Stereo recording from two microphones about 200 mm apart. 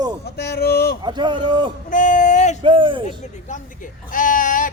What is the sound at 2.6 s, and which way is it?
Speech, 25° right (ahead or behind).